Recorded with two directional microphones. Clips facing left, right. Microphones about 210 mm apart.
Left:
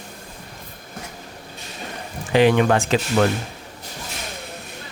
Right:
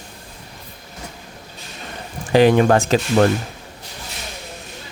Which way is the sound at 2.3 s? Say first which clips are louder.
Right 3 dB; 40° right (ahead or behind).